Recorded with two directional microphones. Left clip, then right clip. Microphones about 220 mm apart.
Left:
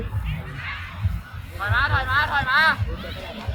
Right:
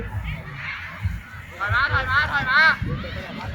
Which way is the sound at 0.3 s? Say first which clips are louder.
Right 1 dB; 55° left (ahead or behind).